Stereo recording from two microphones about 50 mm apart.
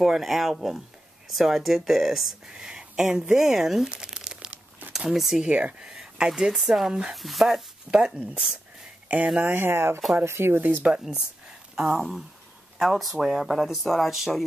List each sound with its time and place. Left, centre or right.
0.0 s speech: centre
2.5 s speech: centre
4.1 s crumpling: centre
4.5 s crumpling: right
4.9 s speech: centre
5.5 s speech: right
5.9 s a sound: centre
6.5 s speech: centre
6.9 s speech: centre
7.2 s speech: centre
7.9 s speech: centre
9.4 s speech: right
10.8 s speech: centre
12.0 s speech: centre